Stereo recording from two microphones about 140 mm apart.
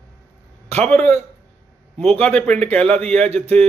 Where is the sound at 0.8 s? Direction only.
10° left (ahead or behind).